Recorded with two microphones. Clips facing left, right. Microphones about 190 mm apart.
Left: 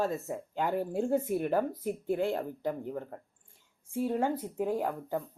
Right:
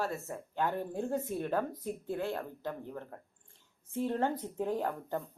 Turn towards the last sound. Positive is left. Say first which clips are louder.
# left 2 dB
turn(degrees=10)  # may be behind; listen again after turning